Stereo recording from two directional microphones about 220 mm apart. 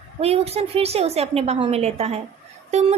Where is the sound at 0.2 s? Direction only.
25° right (ahead or behind).